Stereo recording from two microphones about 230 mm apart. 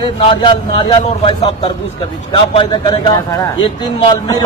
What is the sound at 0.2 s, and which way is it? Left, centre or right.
A man's voice, left.